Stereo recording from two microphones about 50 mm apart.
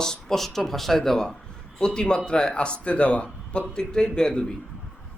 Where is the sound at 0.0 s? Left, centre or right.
Centre.